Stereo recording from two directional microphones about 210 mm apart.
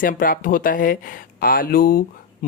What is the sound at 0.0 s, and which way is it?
Speech, 40° left (ahead or behind).